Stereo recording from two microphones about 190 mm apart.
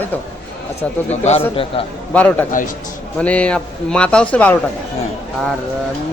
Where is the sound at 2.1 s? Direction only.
10° left (ahead or behind).